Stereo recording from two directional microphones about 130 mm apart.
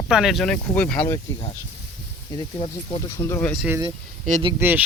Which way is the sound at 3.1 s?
20° left (ahead or behind).